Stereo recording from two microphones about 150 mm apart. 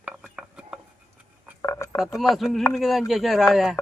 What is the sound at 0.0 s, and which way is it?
Dishes, 10° right (ahead or behind).